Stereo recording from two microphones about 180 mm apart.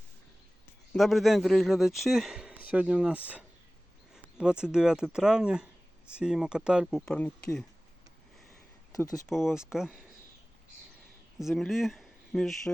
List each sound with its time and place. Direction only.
0.9 s a man's voice: centre (ahead or behind)
8.9 s speech: 20° left (ahead or behind)
9.2 s a man's voice: 5° right (ahead or behind)
11.3 s speech: centre (ahead or behind)